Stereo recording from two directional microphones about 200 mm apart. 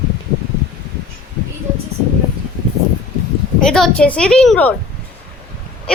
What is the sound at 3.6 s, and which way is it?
A child's voice, centre (ahead or behind).